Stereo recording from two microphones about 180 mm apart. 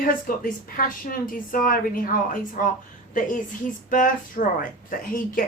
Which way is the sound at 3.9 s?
50° left (ahead or behind).